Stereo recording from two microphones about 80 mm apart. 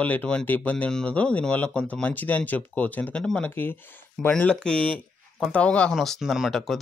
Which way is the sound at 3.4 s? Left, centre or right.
Left.